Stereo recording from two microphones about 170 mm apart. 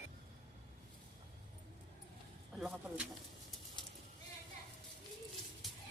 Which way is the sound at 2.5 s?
5° right (ahead or behind).